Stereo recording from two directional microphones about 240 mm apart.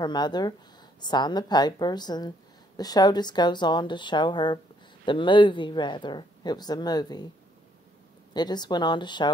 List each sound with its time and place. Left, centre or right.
0.0 s a woman's voice: centre
8.3 s a woman's voice: centre